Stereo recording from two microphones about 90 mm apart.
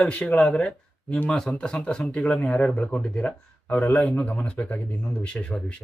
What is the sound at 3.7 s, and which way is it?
Speech, 20° left (ahead or behind).